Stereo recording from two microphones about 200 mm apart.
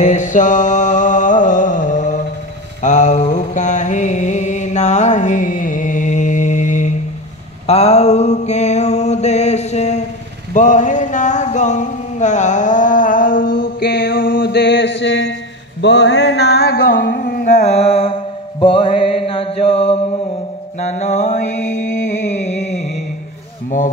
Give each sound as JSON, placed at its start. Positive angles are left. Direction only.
{"t": 0.0, "sound": "mantra", "side_deg": 40}
{"t": 7.6, "sound": "a sound", "side_deg": 30}
{"t": 20.8, "sound": "mantra", "side_deg": 35}